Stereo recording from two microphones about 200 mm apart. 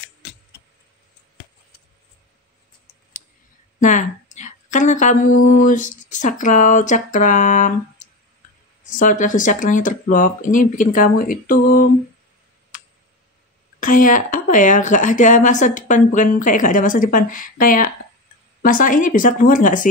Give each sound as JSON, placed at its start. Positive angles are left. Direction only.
{"t": 3.8, "sound": "a sound", "side_deg": 40}
{"t": 5.6, "sound": "speech", "side_deg": 40}
{"t": 13.7, "sound": "speech", "side_deg": 40}